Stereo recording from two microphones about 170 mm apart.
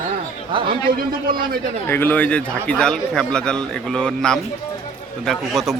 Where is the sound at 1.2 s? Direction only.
60° right (ahead or behind).